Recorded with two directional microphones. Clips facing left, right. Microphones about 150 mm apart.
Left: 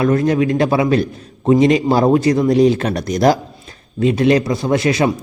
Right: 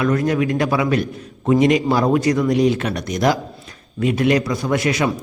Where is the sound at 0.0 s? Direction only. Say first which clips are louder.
Left 3 dB; 30° left (ahead or behind).